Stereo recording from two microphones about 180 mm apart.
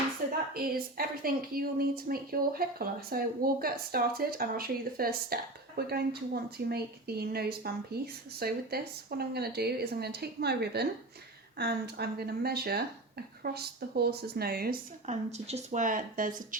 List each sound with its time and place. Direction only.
0.5 s a woman's voice: 55° right (ahead or behind)
15.0 s speech: 40° right (ahead or behind)